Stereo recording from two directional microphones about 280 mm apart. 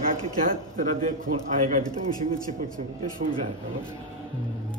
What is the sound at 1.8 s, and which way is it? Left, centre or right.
Speech, centre.